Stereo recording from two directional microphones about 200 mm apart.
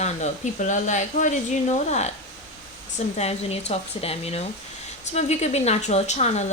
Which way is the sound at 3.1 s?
30° left (ahead or behind).